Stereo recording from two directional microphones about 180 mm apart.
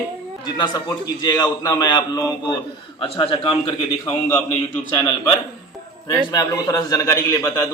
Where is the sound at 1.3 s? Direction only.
20° left (ahead or behind).